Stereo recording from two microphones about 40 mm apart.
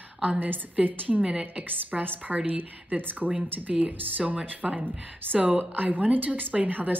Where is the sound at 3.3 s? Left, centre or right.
Right.